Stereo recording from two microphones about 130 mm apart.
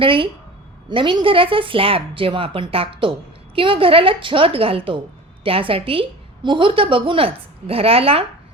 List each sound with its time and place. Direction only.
0.0 s speech: 40° right (ahead or behind)